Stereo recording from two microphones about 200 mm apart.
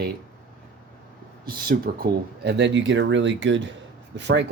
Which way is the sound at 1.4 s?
45° right (ahead or behind).